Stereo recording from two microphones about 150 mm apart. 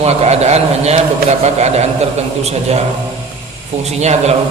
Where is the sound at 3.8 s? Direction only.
45° right (ahead or behind).